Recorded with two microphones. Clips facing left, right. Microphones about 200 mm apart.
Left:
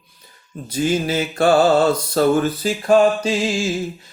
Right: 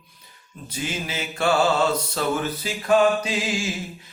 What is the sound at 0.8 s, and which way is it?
Mantra, 40° left (ahead or behind).